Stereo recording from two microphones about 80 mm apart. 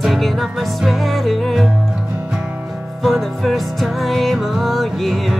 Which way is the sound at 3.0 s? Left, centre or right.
Centre.